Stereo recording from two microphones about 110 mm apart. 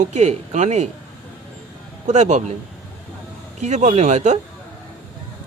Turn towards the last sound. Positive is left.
turn(degrees=-90)